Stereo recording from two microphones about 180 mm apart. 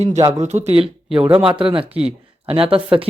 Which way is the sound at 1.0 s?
5° right (ahead or behind).